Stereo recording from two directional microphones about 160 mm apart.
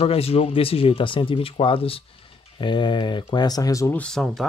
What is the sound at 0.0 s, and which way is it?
Speech, 40° left (ahead or behind).